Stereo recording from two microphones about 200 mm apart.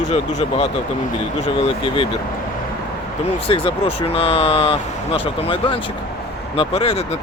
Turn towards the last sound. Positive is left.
turn(degrees=30)  # may be behind; listen again after turning